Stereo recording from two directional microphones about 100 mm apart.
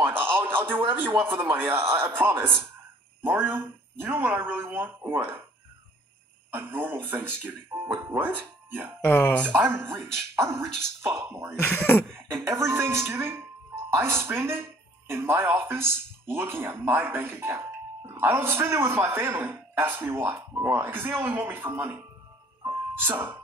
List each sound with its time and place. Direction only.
0.0 s speech: 20° right (ahead or behind)
6.5 s speech: 20° right (ahead or behind)
9.0 s speech: 15° left (ahead or behind)
9.5 s speech: 20° right (ahead or behind)
11.6 s speech: 15° left (ahead or behind)
12.1 s music: 25° right (ahead or behind)
12.4 s speech: 25° right (ahead or behind)
22.6 s music: 25° right (ahead or behind)